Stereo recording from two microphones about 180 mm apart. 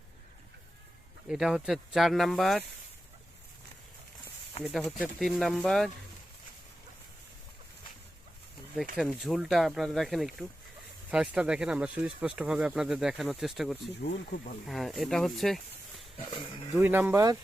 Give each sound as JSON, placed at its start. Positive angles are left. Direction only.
{"t": 1.3, "sound": "speech", "side_deg": 0}
{"t": 4.6, "sound": "speech", "side_deg": 0}
{"t": 9.0, "sound": "speech", "side_deg": 0}
{"t": 16.1, "sound": "speech", "side_deg": 25}
{"t": 16.7, "sound": "speech", "side_deg": -10}